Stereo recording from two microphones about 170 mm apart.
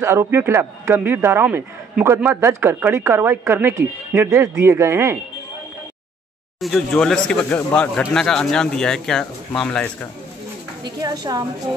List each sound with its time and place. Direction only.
0.0 s a man's voice: 15° right (ahead or behind)
6.6 s a man's voice: centre (ahead or behind)
10.8 s a woman's voice: 20° right (ahead or behind)